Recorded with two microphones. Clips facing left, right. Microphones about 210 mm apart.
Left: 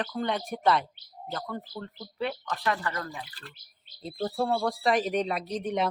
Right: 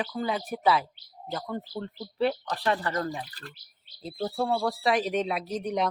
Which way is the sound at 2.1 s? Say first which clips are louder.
Right 5 dB; 35° right (ahead or behind).